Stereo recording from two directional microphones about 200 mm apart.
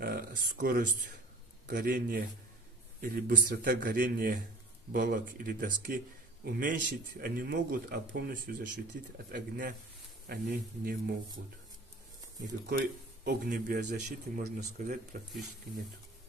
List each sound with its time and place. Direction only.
0.0 s a man's voice: 50° right (ahead or behind)
12.6 s a man's voice: 50° right (ahead or behind)